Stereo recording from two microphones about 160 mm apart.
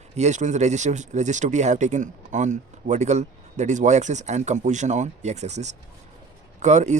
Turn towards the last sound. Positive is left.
turn(degrees=-45)  # may be behind; listen again after turning